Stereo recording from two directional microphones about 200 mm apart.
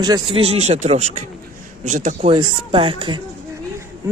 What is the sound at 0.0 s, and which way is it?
Speech, 20° right (ahead or behind).